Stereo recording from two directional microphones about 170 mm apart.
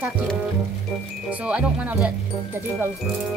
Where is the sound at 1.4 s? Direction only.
5° right (ahead or behind).